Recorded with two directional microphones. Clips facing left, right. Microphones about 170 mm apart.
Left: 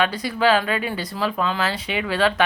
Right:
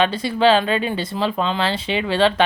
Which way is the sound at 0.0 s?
25° right (ahead or behind).